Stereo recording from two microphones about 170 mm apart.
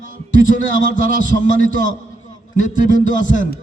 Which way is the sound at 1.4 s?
50° left (ahead or behind).